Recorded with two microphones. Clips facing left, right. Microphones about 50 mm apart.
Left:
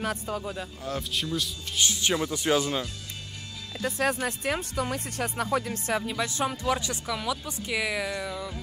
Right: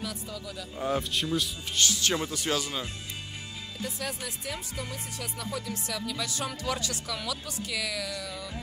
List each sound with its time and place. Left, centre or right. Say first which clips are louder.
0.0 s a man's voice: left 7 dB; left
0.7 s speech: right 9 dB; centre
1.1 s speech: right 1 dB; centre
1.9 s speech: left 2 dB; left
3.8 s speech: left 9 dB; left